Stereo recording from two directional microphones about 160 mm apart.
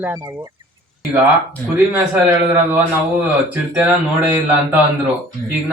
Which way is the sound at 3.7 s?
10° right (ahead or behind).